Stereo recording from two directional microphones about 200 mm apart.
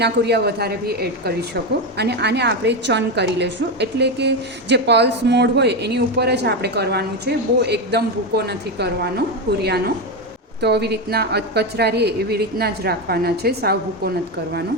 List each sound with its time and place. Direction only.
0.0 s a woman's voice: 55° right (ahead or behind)